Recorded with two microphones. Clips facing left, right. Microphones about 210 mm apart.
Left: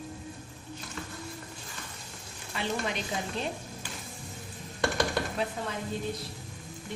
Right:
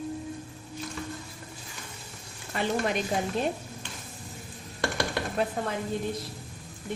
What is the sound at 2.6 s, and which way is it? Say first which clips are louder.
Speech: right 5 dB; 50° right (ahead or behind).